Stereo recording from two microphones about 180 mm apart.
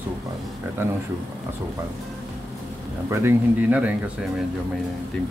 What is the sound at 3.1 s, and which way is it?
Speech, 15° right (ahead or behind).